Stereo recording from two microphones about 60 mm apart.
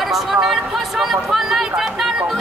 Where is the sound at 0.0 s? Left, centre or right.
Centre.